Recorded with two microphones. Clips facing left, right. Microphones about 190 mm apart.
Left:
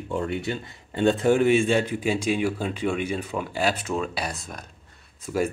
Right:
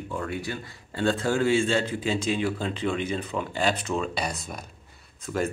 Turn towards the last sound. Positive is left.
turn(degrees=10)  # may be behind; listen again after turning